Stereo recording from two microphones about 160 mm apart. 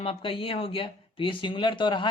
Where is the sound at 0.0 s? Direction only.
35° left (ahead or behind).